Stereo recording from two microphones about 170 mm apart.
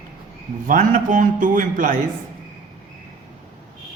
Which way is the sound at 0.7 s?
50° right (ahead or behind).